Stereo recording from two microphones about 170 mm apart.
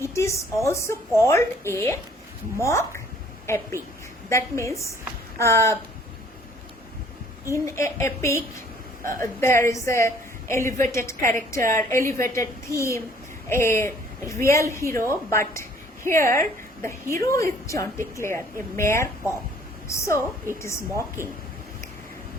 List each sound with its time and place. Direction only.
0.0 s a woman's voice: 15° left (ahead or behind)
7.5 s a woman's voice: 15° left (ahead or behind)